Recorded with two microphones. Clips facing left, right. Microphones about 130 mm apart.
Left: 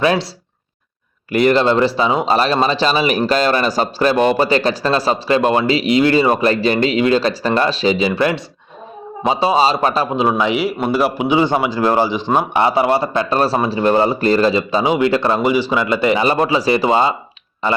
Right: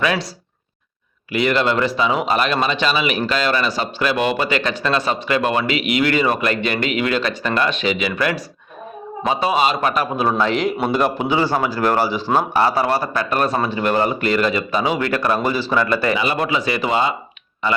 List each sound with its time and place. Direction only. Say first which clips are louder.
0.0 s speech: left 5 dB; 35° left (ahead or behind)
1.3 s a man's voice: left 5 dB; 40° left (ahead or behind)
10.2 s a man's voice: left 2 dB; 15° left (ahead or behind)
16.1 s speech: left 5 dB; 35° left (ahead or behind)